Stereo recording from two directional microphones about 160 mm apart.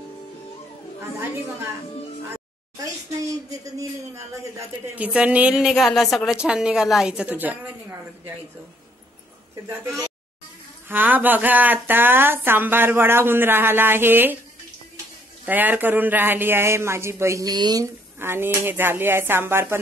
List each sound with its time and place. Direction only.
2.3 s a sound: 20° right (ahead or behind)
4.9 s a woman's voice: 10° right (ahead or behind)
10.9 s a man's voice: 10° right (ahead or behind)
15.4 s a man's voice: 10° right (ahead or behind)